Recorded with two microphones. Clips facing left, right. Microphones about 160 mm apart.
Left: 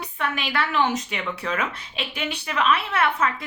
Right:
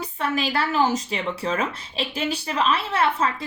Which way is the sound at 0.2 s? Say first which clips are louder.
Right 2 dB; 35° right (ahead or behind).